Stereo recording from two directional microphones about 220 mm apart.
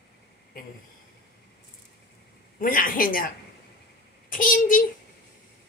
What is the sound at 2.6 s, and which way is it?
A child's voice, 40° left (ahead or behind).